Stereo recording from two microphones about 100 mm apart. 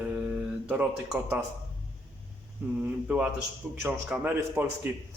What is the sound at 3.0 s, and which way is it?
Speech, 10° right (ahead or behind).